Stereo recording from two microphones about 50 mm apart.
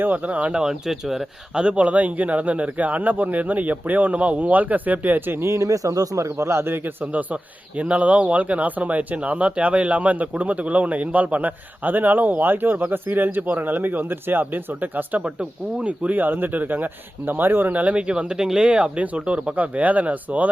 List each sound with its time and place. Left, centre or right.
0.0 s a man's voice: right
0.5 s speech: centre
1.5 s a man's voice: right
5.4 s speech: right
6.3 s a man's voice: right